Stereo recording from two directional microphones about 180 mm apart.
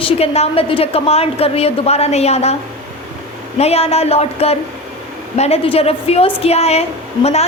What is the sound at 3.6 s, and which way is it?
A woman's voice, 35° left (ahead or behind).